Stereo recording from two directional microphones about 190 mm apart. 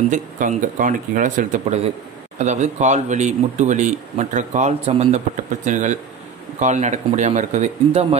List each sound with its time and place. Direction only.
0.1 s speech: 40° right (ahead or behind)